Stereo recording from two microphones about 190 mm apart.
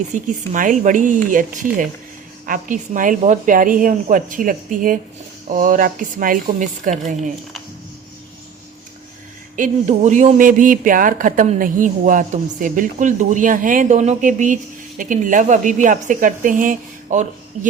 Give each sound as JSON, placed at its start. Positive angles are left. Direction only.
{"t": 0.1, "sound": "speech", "side_deg": -45}
{"t": 9.6, "sound": "speech", "side_deg": -40}